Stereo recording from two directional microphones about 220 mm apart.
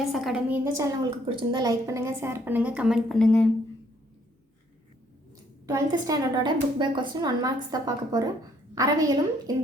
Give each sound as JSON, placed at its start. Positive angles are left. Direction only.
{"t": 0.0, "sound": "a woman's voice", "side_deg": 0}
{"t": 1.3, "sound": "a woman's voice", "side_deg": -20}
{"t": 5.6, "sound": "a woman's voice", "side_deg": -15}